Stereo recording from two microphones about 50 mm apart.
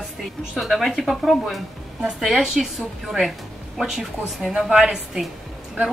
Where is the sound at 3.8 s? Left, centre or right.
Centre.